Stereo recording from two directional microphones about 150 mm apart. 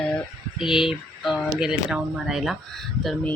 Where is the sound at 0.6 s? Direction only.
5° right (ahead or behind).